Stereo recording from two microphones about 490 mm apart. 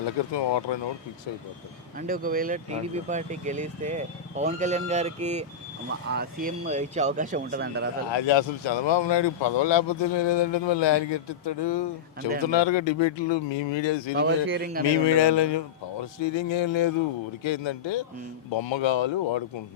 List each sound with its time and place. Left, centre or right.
0.0 s speech: left
2.0 s speech: centre
8.1 s speech: left
14.2 s speech: right
15.0 s speech: left